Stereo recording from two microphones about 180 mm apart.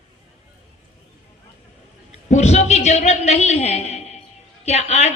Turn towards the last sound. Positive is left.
turn(degrees=40)  # may be behind; listen again after turning